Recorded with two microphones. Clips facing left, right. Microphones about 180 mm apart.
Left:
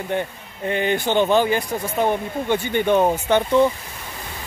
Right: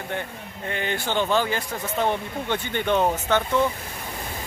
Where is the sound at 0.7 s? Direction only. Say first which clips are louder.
Left 7 dB; 20° left (ahead or behind).